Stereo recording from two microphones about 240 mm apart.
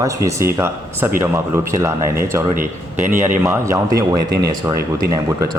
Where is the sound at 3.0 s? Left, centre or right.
Centre.